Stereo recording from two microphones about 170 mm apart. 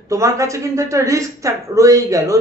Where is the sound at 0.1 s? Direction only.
20° right (ahead or behind).